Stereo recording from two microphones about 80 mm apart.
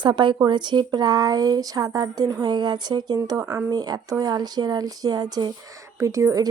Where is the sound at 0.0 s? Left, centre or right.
Right.